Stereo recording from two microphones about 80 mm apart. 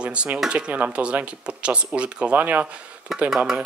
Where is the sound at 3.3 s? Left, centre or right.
Centre.